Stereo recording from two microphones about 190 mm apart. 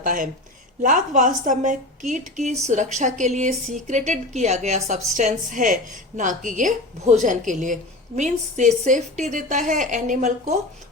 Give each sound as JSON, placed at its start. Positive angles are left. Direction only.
{"t": 0.0, "sound": "a woman's voice", "side_deg": -45}